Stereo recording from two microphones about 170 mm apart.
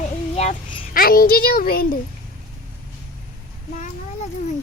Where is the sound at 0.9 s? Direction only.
55° left (ahead or behind).